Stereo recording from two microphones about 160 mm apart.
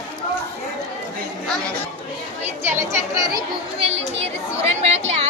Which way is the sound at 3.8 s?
40° right (ahead or behind).